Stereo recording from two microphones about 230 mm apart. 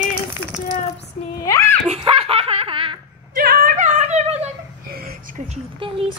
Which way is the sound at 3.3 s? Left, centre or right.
Right.